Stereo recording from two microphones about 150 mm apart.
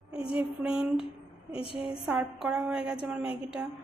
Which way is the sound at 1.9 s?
5° right (ahead or behind).